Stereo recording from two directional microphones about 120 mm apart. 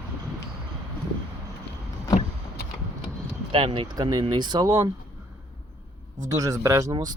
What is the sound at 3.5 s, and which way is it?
Speech, 50° right (ahead or behind).